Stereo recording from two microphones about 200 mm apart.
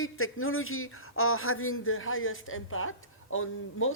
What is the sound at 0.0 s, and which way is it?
A man's voice, 90° left.